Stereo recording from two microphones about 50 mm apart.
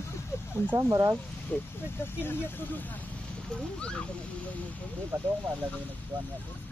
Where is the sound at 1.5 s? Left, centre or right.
Left.